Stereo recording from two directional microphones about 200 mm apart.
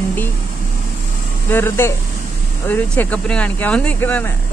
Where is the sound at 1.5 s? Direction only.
10° left (ahead or behind).